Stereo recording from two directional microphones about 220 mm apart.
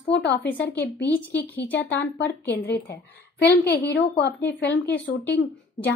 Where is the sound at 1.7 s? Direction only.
50° left (ahead or behind).